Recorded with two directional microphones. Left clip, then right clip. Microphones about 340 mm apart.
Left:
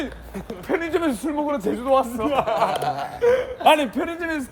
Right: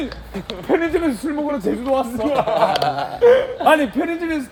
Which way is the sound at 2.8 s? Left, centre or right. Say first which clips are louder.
Right 6 dB; centre.